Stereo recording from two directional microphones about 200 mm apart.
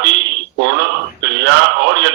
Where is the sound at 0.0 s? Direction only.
65° right (ahead or behind).